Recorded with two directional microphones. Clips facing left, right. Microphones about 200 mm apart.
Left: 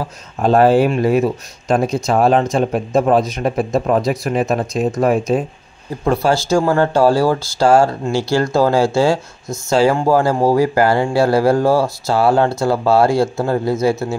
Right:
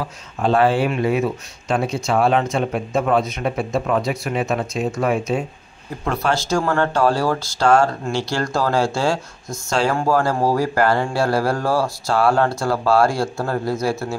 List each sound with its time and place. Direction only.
0.0 s speech: 40° left (ahead or behind)
6.5 s speech: 30° left (ahead or behind)
7.6 s speech: 5° left (ahead or behind)
8.4 s speech: 25° left (ahead or behind)